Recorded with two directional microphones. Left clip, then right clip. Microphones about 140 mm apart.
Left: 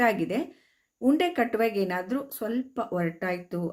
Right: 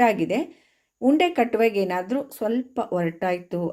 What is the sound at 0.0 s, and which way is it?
Speech, 15° right (ahead or behind).